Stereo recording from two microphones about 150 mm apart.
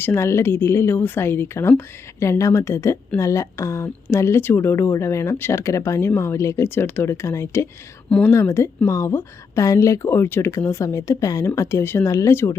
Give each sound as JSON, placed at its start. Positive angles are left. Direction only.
{"t": 0.0, "sound": "a woman's voice", "side_deg": 15}